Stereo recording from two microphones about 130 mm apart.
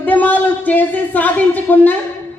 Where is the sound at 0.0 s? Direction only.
10° left (ahead or behind).